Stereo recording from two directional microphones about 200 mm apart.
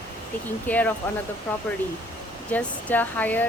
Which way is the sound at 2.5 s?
5° left (ahead or behind).